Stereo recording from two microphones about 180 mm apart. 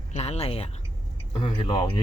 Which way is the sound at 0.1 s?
35° left (ahead or behind).